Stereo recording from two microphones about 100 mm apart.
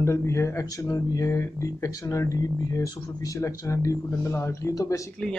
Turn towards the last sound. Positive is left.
turn(degrees=35)  # may be behind; listen again after turning